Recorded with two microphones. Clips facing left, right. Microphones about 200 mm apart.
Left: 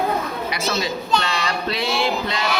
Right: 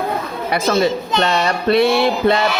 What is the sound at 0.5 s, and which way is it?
A child's voice, 50° right (ahead or behind).